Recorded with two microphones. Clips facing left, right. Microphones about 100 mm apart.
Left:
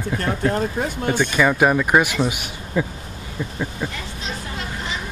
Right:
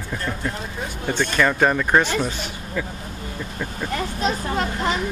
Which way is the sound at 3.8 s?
45° right (ahead or behind).